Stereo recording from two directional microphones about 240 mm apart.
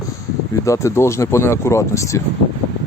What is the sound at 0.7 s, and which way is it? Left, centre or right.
Speech, centre.